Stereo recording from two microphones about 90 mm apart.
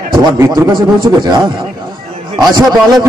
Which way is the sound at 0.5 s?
60° right (ahead or behind).